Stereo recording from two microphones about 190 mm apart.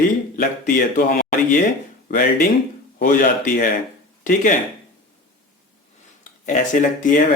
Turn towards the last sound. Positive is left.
turn(degrees=45)  # may be behind; listen again after turning